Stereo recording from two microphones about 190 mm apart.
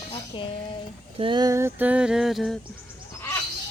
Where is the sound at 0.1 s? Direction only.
25° left (ahead or behind).